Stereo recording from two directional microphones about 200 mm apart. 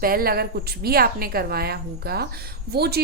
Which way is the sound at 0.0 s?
45° right (ahead or behind).